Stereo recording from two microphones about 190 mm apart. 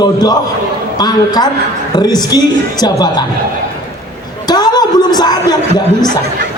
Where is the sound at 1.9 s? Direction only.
20° left (ahead or behind).